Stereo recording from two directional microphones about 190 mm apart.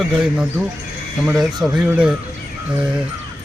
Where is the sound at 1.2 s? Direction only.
5° right (ahead or behind).